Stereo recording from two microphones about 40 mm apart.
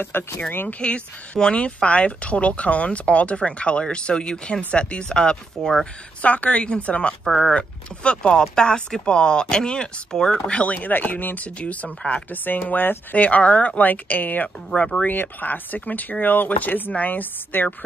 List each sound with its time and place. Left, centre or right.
0.1 s speech: left
0.7 s speech: left
6.2 s speech: left
6.6 s speech: left
7.2 s speech: centre
7.5 s speech: left
10.4 s speech: left
10.9 s speech: left